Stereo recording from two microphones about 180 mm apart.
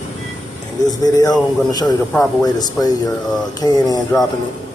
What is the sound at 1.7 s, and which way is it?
Speech, 20° left (ahead or behind).